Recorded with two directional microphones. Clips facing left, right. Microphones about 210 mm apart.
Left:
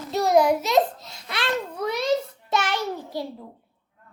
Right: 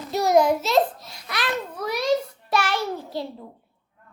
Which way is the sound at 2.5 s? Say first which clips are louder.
Right 1 dB; 20° left (ahead or behind).